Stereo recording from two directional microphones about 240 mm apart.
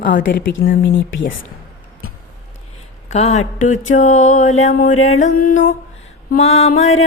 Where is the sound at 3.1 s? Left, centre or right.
Left.